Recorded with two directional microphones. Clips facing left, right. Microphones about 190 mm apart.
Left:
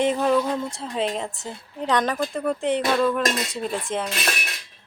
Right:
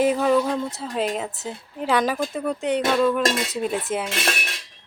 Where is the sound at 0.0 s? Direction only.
5° right (ahead or behind).